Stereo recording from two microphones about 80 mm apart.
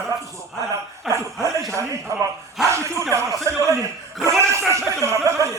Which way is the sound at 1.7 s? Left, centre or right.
Right.